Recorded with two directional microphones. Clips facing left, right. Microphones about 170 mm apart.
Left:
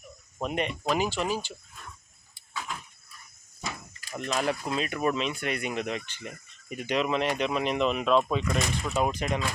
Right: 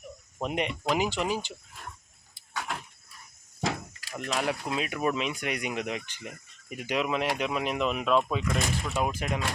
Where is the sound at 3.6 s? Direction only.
90° right.